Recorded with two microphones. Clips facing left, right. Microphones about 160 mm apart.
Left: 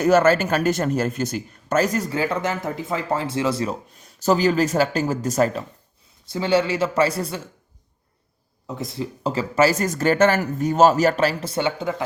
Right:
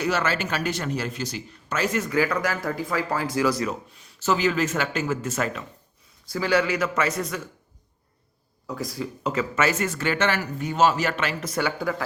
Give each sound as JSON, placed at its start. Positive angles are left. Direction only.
{"t": 0.0, "sound": "speech", "side_deg": 45}
{"t": 3.9, "sound": "speech", "side_deg": 40}
{"t": 6.2, "sound": "speech", "side_deg": 25}
{"t": 8.6, "sound": "speech", "side_deg": 25}